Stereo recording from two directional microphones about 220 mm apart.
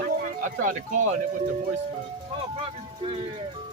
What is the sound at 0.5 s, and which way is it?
Speech, 35° right (ahead or behind).